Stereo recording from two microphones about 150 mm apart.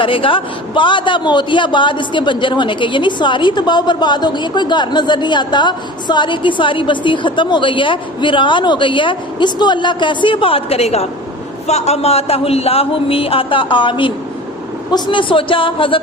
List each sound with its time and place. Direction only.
0.0 s a man's voice: 35° left (ahead or behind)